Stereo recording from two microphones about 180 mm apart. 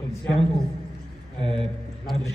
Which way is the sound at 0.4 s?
30° left (ahead or behind).